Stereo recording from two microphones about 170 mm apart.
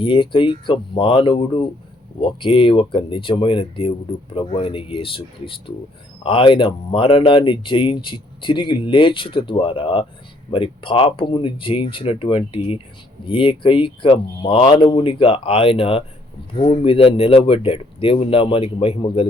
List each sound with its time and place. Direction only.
0.0 s speech: 30° left (ahead or behind)